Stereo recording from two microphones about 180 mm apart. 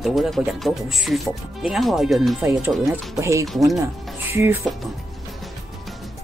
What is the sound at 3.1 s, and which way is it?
Speech, 15° right (ahead or behind).